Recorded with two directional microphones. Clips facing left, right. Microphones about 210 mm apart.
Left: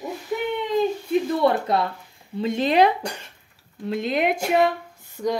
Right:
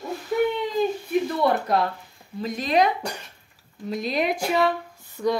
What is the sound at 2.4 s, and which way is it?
Speech, 30° left (ahead or behind).